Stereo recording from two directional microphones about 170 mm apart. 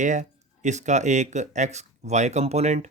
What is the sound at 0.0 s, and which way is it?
Speech, 45° right (ahead or behind).